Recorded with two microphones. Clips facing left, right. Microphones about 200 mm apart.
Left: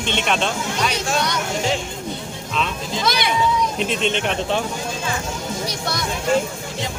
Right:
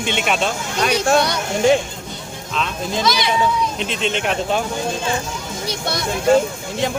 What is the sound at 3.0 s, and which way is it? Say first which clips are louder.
Speech: right 1 dB; 55° left (ahead or behind).